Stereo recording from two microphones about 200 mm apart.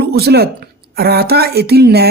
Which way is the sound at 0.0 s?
55° right (ahead or behind).